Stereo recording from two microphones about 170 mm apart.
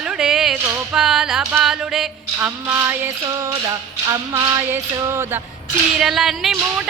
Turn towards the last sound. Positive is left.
turn(degrees=0)  # may be behind; listen again after turning